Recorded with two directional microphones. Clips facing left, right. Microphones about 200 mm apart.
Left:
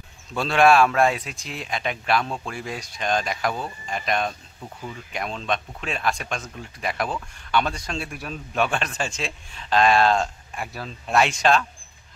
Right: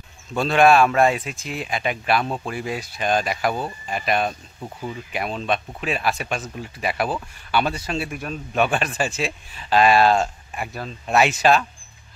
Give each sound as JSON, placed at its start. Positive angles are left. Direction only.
{"t": 0.3, "sound": "speech", "side_deg": 0}
{"t": 4.6, "sound": "speech", "side_deg": -20}
{"t": 5.1, "sound": "speech", "side_deg": -5}